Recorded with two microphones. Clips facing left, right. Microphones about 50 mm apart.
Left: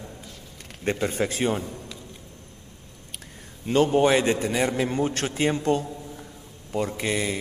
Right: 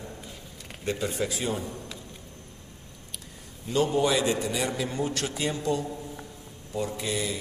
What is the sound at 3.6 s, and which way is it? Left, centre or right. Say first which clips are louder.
A man's voice: left 5 dB; left.